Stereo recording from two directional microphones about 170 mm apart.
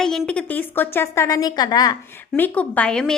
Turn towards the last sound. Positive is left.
turn(degrees=5)  # may be behind; listen again after turning